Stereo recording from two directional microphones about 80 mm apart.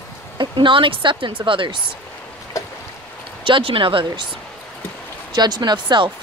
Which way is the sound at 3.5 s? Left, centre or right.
Right.